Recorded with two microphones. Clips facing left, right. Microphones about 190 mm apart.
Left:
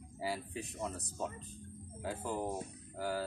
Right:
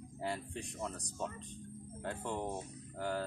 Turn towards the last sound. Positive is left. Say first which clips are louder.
# even
turn(degrees=5)  # may be behind; listen again after turning